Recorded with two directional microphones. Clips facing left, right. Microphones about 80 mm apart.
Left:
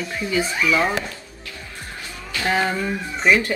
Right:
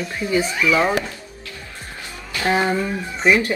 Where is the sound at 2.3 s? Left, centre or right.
Right.